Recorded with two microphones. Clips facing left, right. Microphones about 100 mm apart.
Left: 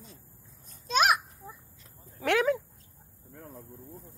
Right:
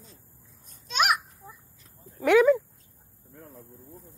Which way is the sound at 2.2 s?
Centre (ahead or behind).